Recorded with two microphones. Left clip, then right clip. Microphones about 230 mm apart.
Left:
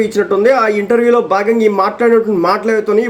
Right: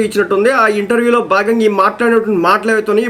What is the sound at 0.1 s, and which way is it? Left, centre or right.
Speech, centre.